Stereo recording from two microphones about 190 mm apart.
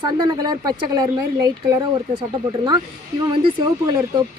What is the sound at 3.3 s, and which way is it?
Speech, 25° right (ahead or behind).